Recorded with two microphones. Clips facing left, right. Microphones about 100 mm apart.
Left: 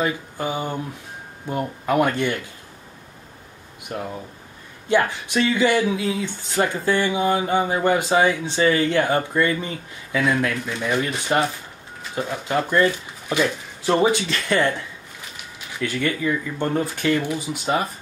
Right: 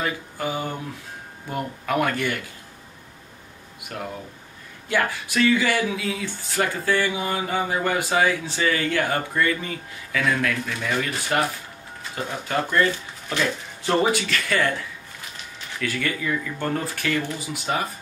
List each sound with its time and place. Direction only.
0.0 s speech: 20° left (ahead or behind)
4.8 s speech: 25° left (ahead or behind)
12.4 s speech: 20° left (ahead or behind)
14.1 s speech: 25° left (ahead or behind)
15.8 s speech: 20° left (ahead or behind)